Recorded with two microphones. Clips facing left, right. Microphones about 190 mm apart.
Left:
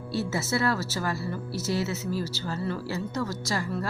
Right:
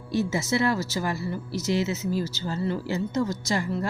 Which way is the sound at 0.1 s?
15° right (ahead or behind).